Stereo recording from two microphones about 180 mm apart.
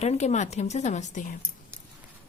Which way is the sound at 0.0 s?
40° left (ahead or behind).